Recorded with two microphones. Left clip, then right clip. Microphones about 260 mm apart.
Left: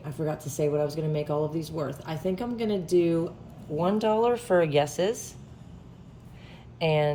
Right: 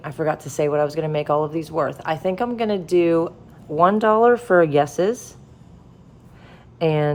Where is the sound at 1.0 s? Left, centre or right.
Right.